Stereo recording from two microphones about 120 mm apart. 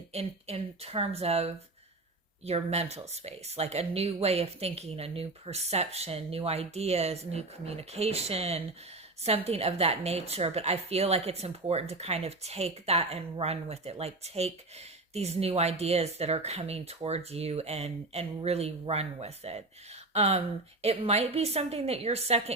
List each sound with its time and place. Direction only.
0.1 s speech: 55° right (ahead or behind)